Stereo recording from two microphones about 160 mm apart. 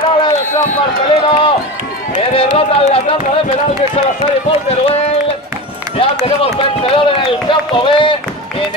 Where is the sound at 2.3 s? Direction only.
35° left (ahead or behind).